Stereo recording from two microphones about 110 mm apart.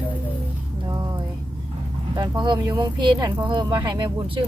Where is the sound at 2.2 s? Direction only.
45° right (ahead or behind).